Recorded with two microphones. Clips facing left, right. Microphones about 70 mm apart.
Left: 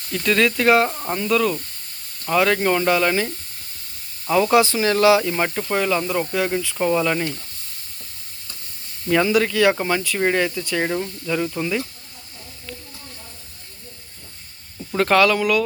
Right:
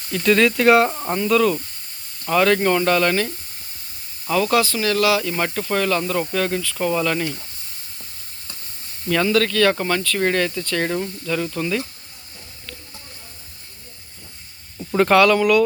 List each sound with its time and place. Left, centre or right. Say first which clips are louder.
0.1 s speech: right 2 dB; centre; by 5.3 s left
5.3 s speech: even; centre
9.0 s speech: left 1 dB; centre
14.8 s speech: right 2 dB; centre